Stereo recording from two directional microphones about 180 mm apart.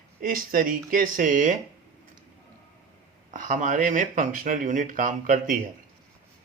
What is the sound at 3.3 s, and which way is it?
Speech, 45° right (ahead or behind).